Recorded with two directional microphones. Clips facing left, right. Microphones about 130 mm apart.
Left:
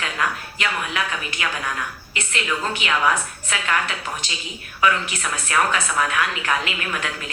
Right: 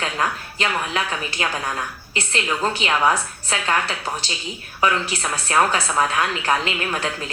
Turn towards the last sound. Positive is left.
turn(degrees=-35)  # may be behind; listen again after turning